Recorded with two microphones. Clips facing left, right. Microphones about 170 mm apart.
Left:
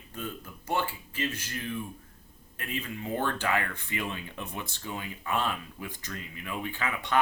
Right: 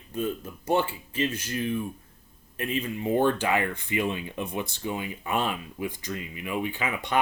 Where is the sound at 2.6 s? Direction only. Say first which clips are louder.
Right 6 dB; 20° right (ahead or behind).